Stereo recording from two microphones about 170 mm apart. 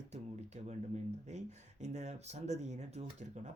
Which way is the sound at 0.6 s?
40° right (ahead or behind).